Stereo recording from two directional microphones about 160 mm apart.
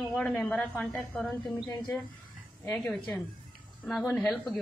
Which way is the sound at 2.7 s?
20° left (ahead or behind).